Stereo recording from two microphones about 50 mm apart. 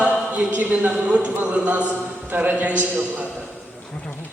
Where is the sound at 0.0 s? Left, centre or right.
Right.